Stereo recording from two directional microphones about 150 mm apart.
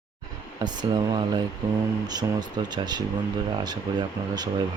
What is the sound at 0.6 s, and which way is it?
Speech, 30° right (ahead or behind).